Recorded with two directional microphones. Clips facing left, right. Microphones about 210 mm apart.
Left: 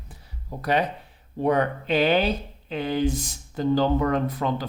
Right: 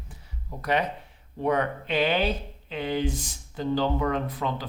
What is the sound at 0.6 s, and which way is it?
Speech, 35° left (ahead or behind).